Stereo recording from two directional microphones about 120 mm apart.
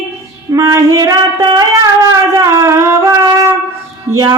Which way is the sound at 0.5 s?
30° right (ahead or behind).